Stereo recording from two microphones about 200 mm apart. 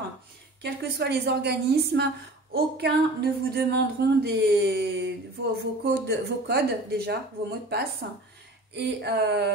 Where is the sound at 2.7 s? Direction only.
50° right (ahead or behind).